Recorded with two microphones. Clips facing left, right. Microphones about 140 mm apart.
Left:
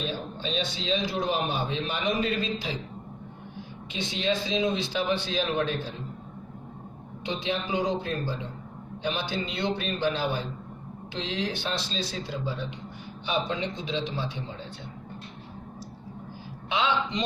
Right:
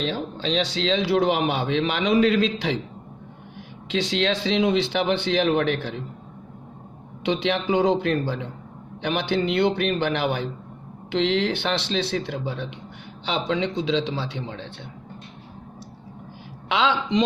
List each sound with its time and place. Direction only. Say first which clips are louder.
0.0 s a man's voice: right 6 dB; 90° right
3.8 s speech: right 6 dB; 90° right
7.3 s a man's voice: right 7 dB; 75° right (ahead or behind)
13.2 s a man's voice: right 4 dB; 90° right
16.6 s a man's voice: right 4 dB; 90° right